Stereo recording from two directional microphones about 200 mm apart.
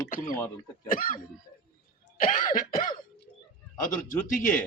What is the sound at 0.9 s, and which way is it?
Cough, 45° left (ahead or behind).